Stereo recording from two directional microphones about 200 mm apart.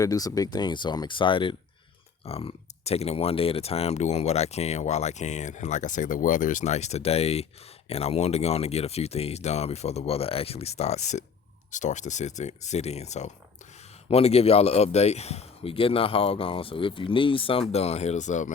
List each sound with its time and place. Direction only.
0.0 s speech: 15° left (ahead or behind); by 18.5 s 35° left (ahead or behind)